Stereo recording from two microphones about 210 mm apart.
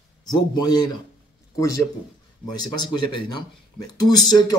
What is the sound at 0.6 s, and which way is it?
A man's voice, 20° left (ahead or behind).